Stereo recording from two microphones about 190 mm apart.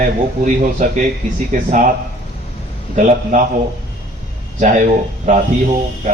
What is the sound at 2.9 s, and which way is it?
Speech, 40° right (ahead or behind).